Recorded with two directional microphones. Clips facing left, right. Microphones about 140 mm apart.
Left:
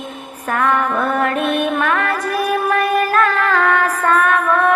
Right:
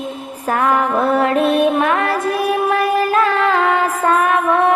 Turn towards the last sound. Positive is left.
turn(degrees=-25)  # may be behind; listen again after turning